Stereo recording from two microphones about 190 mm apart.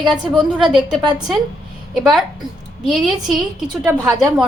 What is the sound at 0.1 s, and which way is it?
Speech, 5° right (ahead or behind).